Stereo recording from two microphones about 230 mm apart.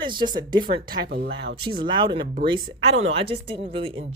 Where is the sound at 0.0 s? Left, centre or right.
Centre.